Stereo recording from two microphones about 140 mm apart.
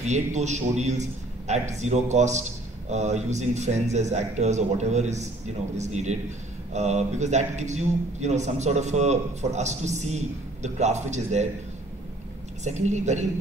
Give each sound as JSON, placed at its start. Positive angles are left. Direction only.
{"t": 0.0, "sound": "a man's voice", "side_deg": -55}
{"t": 12.6, "sound": "a man's voice", "side_deg": -55}